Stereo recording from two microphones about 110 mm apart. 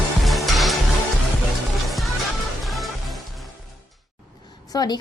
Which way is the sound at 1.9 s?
Centre (ahead or behind).